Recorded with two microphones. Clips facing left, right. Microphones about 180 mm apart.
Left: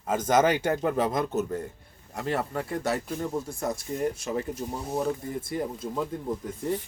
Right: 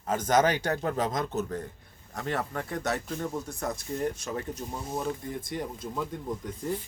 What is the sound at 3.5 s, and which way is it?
Speech, 25° left (ahead or behind).